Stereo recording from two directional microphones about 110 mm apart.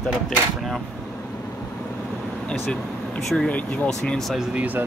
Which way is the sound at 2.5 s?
5° left (ahead or behind).